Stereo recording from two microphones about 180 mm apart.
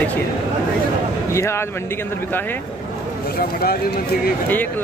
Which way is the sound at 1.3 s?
15° left (ahead or behind).